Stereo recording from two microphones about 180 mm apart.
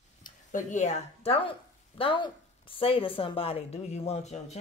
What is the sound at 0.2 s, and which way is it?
Speech, 45° left (ahead or behind).